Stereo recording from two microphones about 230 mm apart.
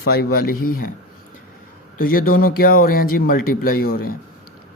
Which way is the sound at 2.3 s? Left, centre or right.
Left.